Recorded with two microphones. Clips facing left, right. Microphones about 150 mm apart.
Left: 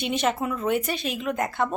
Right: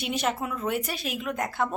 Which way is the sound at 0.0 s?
Centre (ahead or behind).